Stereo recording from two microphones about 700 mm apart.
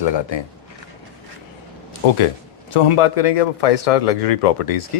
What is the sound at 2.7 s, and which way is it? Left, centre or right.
A man's voice, left.